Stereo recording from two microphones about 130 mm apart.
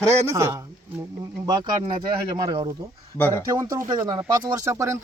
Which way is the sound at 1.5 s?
30° right (ahead or behind).